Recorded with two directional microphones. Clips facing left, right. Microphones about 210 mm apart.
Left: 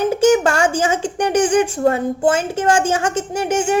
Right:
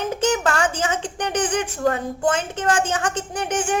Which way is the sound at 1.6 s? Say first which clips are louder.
Left 5 dB; 30° left (ahead or behind).